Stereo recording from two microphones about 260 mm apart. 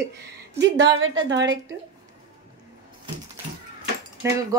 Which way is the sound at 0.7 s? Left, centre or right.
Right.